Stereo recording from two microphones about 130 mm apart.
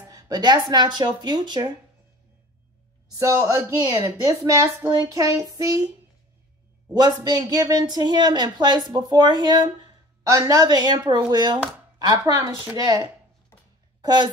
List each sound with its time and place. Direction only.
0.1 s speech: 30° right (ahead or behind)
3.1 s a woman's voice: 25° right (ahead or behind)
6.9 s a woman's voice: 30° right (ahead or behind)
13.5 s a sound: 20° left (ahead or behind)
14.0 s speech: 35° right (ahead or behind)